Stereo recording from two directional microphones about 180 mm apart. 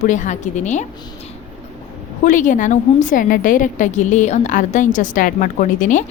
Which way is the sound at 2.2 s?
45° left (ahead or behind).